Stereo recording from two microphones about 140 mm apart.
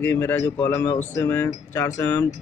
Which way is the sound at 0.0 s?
15° left (ahead or behind).